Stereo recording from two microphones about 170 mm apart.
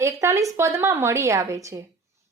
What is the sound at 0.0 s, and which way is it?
A woman's voice, 20° right (ahead or behind).